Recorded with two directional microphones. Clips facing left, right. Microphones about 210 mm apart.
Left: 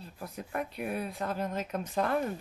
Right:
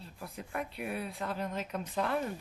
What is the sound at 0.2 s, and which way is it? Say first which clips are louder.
Speech: left 3 dB; 45° left (ahead or behind).